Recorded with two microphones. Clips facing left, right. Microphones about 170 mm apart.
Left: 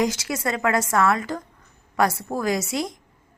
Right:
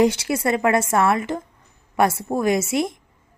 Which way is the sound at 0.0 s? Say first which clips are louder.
Right 5 dB; 30° right (ahead or behind).